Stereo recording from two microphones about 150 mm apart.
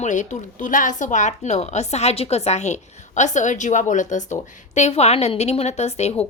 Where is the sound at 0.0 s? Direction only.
55° left (ahead or behind).